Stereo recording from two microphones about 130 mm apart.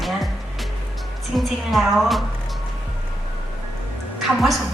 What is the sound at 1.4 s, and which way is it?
Speech, centre (ahead or behind).